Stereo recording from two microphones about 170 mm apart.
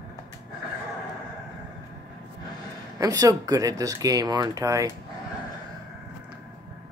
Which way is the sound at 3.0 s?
20° right (ahead or behind).